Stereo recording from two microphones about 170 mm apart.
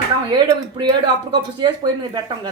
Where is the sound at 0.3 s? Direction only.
25° right (ahead or behind).